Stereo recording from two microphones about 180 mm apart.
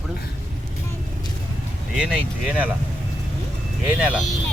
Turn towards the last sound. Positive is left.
turn(degrees=-5)  # may be behind; listen again after turning